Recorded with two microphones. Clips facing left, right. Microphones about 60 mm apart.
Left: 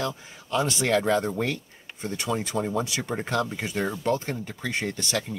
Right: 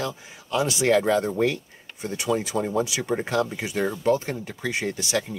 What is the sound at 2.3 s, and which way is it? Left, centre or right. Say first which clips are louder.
Speech: right 3 dB; centre.